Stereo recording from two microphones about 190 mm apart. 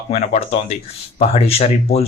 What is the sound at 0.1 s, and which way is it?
Speech, 35° left (ahead or behind).